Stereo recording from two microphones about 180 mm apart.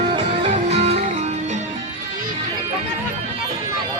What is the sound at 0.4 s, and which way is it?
Music, 35° right (ahead or behind).